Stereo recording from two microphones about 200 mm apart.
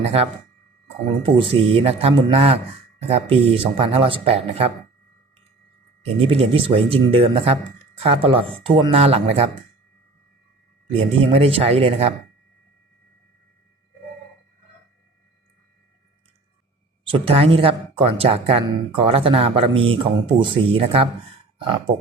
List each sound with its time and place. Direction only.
0.0 s speech: 30° right (ahead or behind)
6.1 s speech: 30° right (ahead or behind)
10.9 s speech: 30° right (ahead or behind)
17.1 s speech: 30° right (ahead or behind)